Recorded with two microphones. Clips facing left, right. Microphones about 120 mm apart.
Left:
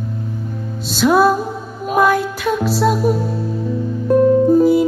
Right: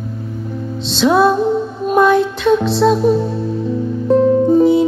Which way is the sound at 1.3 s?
25° right (ahead or behind).